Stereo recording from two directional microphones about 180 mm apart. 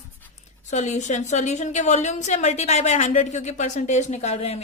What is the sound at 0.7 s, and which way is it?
A woman's voice, 40° left (ahead or behind).